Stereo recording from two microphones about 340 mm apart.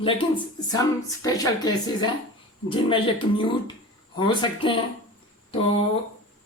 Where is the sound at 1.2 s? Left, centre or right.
Centre.